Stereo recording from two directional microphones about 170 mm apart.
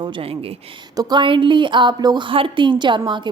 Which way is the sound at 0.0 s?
35° right (ahead or behind).